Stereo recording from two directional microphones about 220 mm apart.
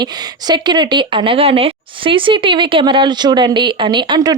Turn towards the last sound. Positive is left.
turn(degrees=-20)  # may be behind; listen again after turning